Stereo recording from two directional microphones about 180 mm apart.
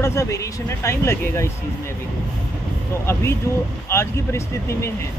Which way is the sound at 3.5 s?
15° left (ahead or behind).